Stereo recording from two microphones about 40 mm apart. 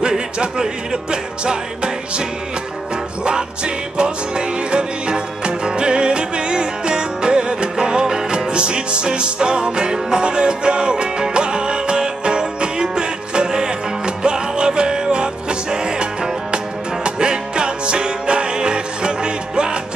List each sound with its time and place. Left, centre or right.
1.1 s music: right
3.3 s music: right